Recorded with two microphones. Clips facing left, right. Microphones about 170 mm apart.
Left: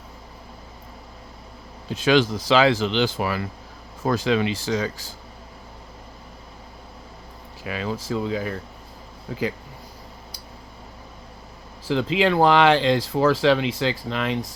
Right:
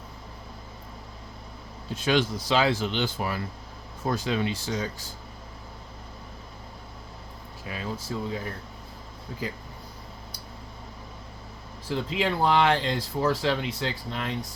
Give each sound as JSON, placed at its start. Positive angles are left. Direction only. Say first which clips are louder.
{"t": 1.9, "sound": "speech", "louder": "left 6 dB", "side_deg": 90}
{"t": 7.6, "sound": "speech", "louder": "left 6 dB", "side_deg": 90}
{"t": 11.9, "sound": "speech", "louder": "left 7 dB", "side_deg": 90}